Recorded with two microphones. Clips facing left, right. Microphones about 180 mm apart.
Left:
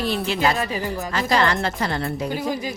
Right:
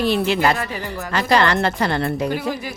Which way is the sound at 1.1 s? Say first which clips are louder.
Right 4 dB; 70° right (ahead or behind).